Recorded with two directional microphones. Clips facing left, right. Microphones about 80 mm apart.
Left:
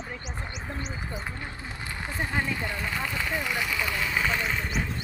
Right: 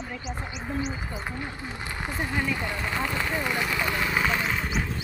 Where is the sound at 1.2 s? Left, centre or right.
Right.